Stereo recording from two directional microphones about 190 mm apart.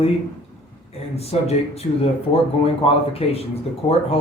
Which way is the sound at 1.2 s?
35° left (ahead or behind).